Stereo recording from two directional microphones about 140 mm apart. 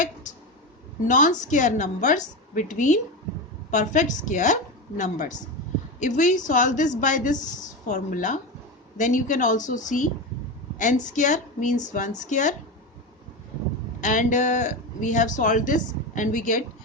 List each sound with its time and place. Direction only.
1.0 s speech: 65° left (ahead or behind)
14.0 s speech: 65° left (ahead or behind)